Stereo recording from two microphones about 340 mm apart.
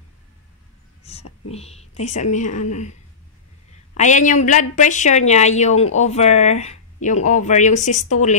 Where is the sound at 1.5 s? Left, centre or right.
Centre.